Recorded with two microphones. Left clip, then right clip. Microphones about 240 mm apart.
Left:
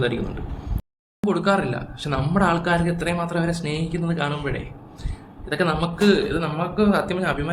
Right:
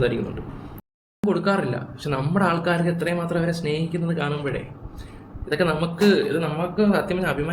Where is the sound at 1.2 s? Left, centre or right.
Centre.